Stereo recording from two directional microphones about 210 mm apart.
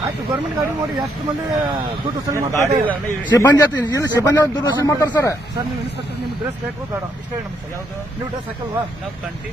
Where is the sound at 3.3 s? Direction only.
10° left (ahead or behind).